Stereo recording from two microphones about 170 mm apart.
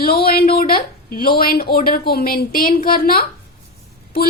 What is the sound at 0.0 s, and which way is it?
A woman's voice, 60° left (ahead or behind).